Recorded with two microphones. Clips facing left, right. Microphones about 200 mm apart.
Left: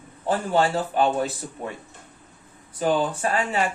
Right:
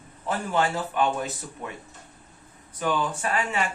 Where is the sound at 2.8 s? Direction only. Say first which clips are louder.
Left 4 dB; 35° left (ahead or behind).